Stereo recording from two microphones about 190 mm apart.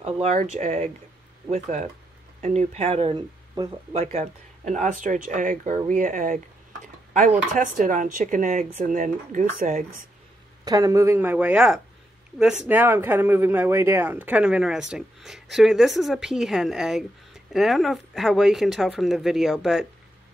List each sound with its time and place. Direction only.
0.0 s speech: 35° right (ahead or behind)
3.9 s speech: 35° right (ahead or behind)
10.6 s speech: 20° right (ahead or behind); by 19.9 s centre (ahead or behind)